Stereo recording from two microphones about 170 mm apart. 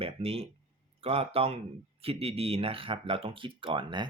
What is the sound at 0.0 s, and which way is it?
Speech, 35° right (ahead or behind).